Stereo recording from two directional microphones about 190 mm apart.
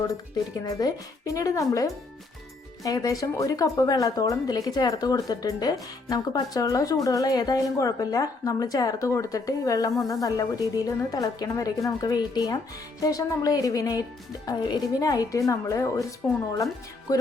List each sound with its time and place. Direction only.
0.6 s a woman's voice: 20° left (ahead or behind)
17.1 s a woman's voice: 15° left (ahead or behind)